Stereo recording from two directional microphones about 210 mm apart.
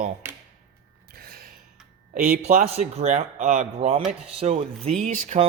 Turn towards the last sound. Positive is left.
turn(degrees=-35)  # may be behind; listen again after turning